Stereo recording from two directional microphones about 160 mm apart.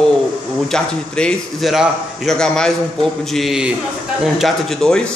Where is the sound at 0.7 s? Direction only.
5° left (ahead or behind).